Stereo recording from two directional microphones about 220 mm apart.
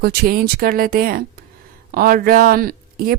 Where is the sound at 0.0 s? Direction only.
45° right (ahead or behind).